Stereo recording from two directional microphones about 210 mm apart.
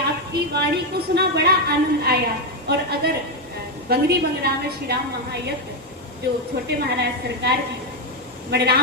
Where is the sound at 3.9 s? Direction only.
50° right (ahead or behind).